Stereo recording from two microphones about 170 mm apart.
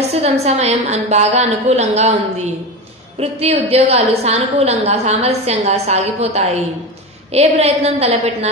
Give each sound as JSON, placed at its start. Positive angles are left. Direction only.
{"t": 0.1, "sound": "a woman's voice", "side_deg": -40}